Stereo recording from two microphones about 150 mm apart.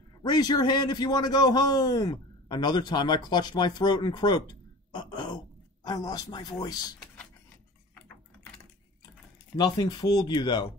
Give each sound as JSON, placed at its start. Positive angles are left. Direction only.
{"t": 0.2, "sound": "a man's voice", "side_deg": 25}
{"t": 4.9, "sound": "gasp", "side_deg": 30}
{"t": 5.9, "sound": "a man's voice", "side_deg": 25}
{"t": 9.6, "sound": "a man's voice", "side_deg": 30}